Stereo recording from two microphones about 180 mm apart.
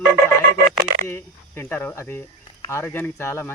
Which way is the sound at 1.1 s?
10° left (ahead or behind).